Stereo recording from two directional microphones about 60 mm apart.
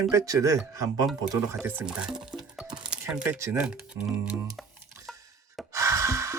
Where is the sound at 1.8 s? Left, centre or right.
Centre.